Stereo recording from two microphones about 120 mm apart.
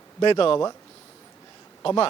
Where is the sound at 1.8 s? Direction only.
45° left (ahead or behind).